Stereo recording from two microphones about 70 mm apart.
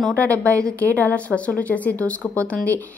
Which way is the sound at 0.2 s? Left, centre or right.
Left.